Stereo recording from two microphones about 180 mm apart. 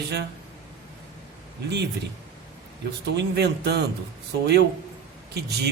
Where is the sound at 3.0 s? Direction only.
65° right (ahead or behind).